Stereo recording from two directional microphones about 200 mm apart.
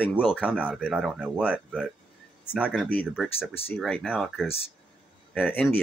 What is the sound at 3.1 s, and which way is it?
Speech, 5° right (ahead or behind).